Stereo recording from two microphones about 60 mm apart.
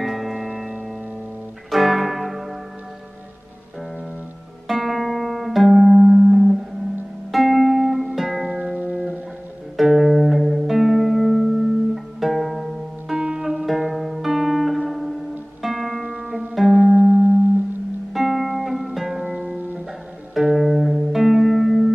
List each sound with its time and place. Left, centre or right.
0.0 s music: centre
1.7 s music: centre
4.6 s music: centre
8.5 s music: right
9.8 s music: centre
13.1 s music: centre
16.7 s music: right
18.1 s music: centre
19.3 s music: right
20.3 s music: centre